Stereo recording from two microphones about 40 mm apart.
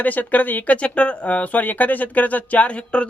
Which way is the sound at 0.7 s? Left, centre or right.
Left.